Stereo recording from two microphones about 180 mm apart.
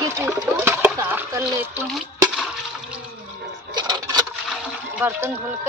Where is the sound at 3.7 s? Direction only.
25° right (ahead or behind).